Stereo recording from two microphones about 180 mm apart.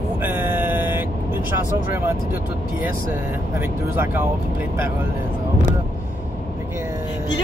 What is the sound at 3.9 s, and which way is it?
Speech, 10° right (ahead or behind).